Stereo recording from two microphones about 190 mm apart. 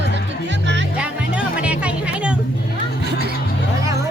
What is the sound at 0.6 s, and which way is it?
Music, 70° right (ahead or behind).